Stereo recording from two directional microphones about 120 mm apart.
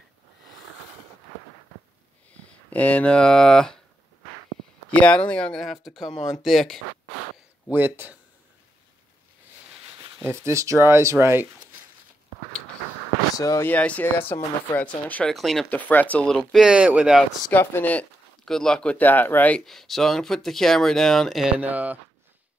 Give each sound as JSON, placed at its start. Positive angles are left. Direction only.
{"t": 2.7, "sound": "speech", "side_deg": 10}
{"t": 4.9, "sound": "speech", "side_deg": 10}
{"t": 7.7, "sound": "speech", "side_deg": -15}
{"t": 9.9, "sound": "speech", "side_deg": -25}
{"t": 13.4, "sound": "speech", "side_deg": 25}
{"t": 13.7, "sound": "speech", "side_deg": 10}
{"t": 15.7, "sound": "speech", "side_deg": 15}
{"t": 16.5, "sound": "speech", "side_deg": -5}
{"t": 17.5, "sound": "speech", "side_deg": 15}
{"t": 19.6, "sound": "speech", "side_deg": 0}
{"t": 21.5, "sound": "speech", "side_deg": -15}